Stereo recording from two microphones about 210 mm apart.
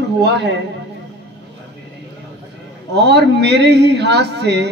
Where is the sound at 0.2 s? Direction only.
55° right (ahead or behind).